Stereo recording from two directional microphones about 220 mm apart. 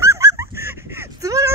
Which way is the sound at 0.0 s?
15° right (ahead or behind).